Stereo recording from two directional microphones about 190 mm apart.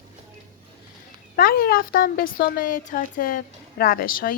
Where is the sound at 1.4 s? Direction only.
50° left (ahead or behind).